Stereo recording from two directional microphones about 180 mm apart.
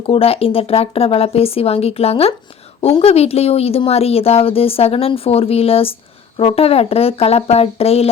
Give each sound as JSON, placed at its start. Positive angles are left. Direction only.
{"t": 0.0, "sound": "speech", "side_deg": 30}